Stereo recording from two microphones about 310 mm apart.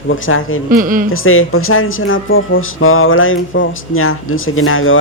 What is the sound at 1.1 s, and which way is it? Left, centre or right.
Speech, left.